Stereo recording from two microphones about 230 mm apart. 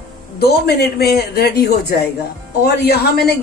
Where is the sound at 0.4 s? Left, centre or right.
Left.